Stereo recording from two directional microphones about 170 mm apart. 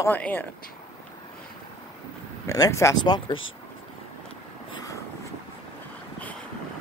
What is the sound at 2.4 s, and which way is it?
Speech, 20° left (ahead or behind).